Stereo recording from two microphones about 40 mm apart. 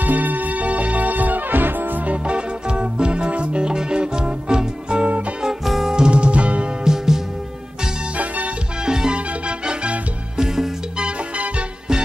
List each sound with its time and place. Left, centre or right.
0.0 s music: right
2.0 s music: right
5.4 s music: centre
5.9 s music: right
6.8 s music: centre
8.8 s music: centre
11.0 s music: right